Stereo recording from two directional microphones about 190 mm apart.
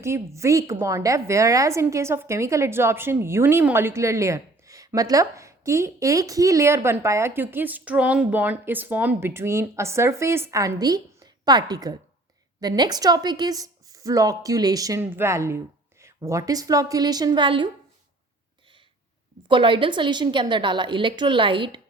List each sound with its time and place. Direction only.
0.3 s a woman's voice: 15° right (ahead or behind)
19.5 s a woman's voice: 25° right (ahead or behind)